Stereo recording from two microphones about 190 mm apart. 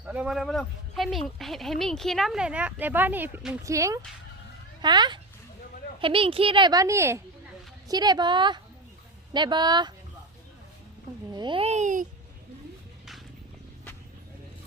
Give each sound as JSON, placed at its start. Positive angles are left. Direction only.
{"t": 0.0, "sound": "a woman's voice", "side_deg": -5}
{"t": 11.3, "sound": "a child's voice", "side_deg": -25}